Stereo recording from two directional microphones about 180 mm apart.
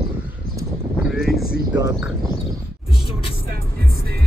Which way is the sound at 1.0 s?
Centre (ahead or behind).